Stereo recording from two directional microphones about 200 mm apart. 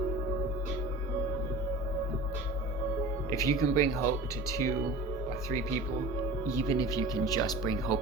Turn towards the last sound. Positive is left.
turn(degrees=15)  # may be behind; listen again after turning